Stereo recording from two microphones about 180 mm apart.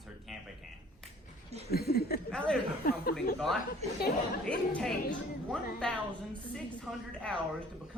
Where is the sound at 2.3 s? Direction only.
5° left (ahead or behind).